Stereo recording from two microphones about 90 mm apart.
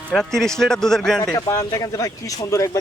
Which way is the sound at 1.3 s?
35° left (ahead or behind).